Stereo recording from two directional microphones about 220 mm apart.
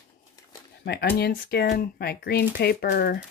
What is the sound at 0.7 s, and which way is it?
Speech, 45° left (ahead or behind).